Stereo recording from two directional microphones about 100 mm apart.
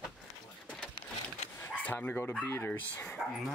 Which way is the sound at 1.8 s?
15° left (ahead or behind).